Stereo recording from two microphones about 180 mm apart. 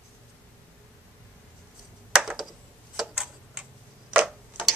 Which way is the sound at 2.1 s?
Centre (ahead or behind).